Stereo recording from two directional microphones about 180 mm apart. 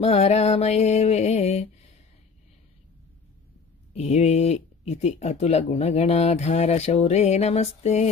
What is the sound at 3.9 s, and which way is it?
Speech, 35° left (ahead or behind).